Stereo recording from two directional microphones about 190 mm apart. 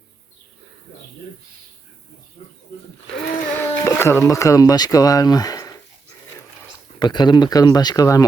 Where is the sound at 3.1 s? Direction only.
10° left (ahead or behind).